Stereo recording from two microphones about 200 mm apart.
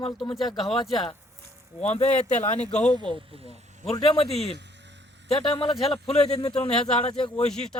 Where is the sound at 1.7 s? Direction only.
35° left (ahead or behind).